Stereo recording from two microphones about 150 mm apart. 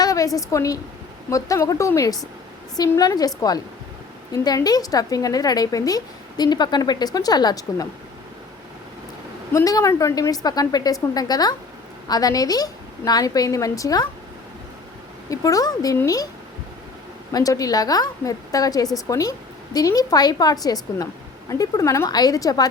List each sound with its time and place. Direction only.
0.0 s a sound: 25° left (ahead or behind)
0.3 s a woman's voice: 20° left (ahead or behind)
9.5 s a woman's voice: 20° left (ahead or behind)
15.3 s a woman's voice: 20° left (ahead or behind)
17.3 s a woman's voice: 25° left (ahead or behind)